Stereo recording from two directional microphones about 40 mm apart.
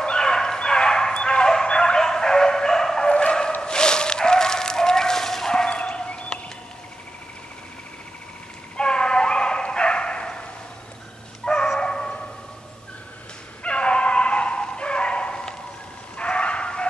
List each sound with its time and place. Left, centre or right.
0.0 s bow-wow: left
1.1 s dog: left
5.7 s a sound: left
8.7 s bow-wow: left
11.4 s dog: left
13.7 s dog: left
16.2 s bow-wow: left